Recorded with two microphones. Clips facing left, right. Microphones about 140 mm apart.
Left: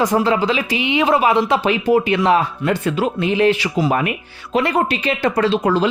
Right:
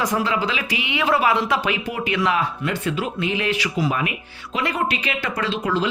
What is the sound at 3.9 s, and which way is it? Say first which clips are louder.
Speech: left 5 dB; 45° left (ahead or behind).